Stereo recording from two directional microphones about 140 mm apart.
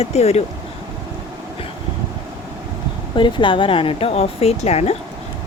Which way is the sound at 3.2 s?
35° left (ahead or behind).